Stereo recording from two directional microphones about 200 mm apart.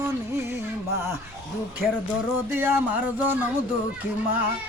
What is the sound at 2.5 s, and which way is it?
Speech, 10° right (ahead or behind).